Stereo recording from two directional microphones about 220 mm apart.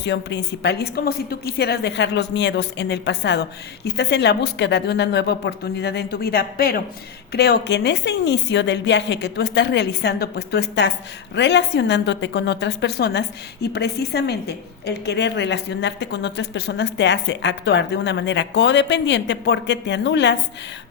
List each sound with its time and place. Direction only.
0.0 s a woman's voice: 50° left (ahead or behind)